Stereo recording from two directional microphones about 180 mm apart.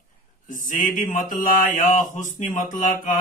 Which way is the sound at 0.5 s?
45° left (ahead or behind).